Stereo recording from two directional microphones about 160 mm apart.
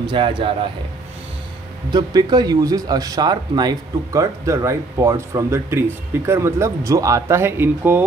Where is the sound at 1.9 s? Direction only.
25° right (ahead or behind).